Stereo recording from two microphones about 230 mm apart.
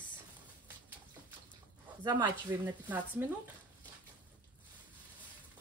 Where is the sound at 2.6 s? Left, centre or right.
Centre.